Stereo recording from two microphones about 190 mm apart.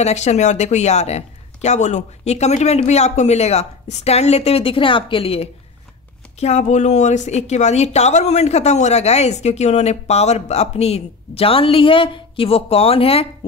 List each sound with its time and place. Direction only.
0.0 s speech: 35° left (ahead or behind)